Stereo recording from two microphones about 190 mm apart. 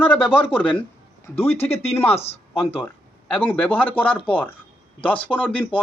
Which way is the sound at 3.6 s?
10° left (ahead or behind).